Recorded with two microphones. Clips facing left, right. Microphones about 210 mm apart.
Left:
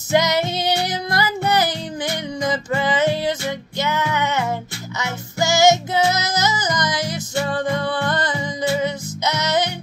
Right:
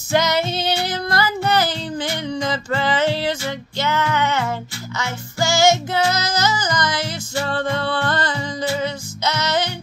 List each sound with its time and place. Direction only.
0.1 s music: 20° left (ahead or behind)